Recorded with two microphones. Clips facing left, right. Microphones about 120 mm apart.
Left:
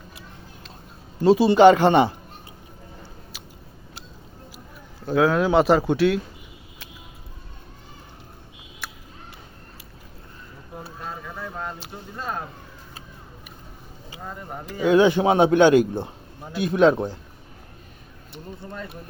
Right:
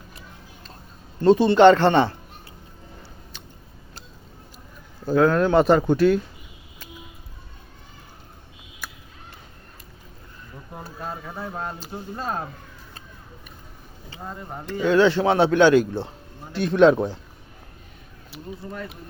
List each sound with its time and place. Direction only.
1.2 s speech: 10° left (ahead or behind)
4.9 s speech: centre (ahead or behind)
8.8 s a sound: centre (ahead or behind)
11.3 s a sound: 20° right (ahead or behind)
11.9 s speech: 30° right (ahead or behind)
14.7 s speech: 15° left (ahead or behind)
18.3 s speech: centre (ahead or behind)